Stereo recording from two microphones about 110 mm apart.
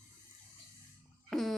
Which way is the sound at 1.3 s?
Centre (ahead or behind).